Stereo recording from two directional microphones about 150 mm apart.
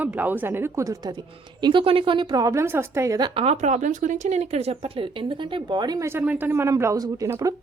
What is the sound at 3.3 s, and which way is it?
A woman's voice, 45° right (ahead or behind).